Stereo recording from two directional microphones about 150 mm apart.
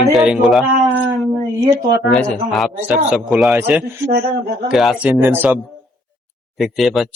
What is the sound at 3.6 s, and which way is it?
Speech, 15° right (ahead or behind).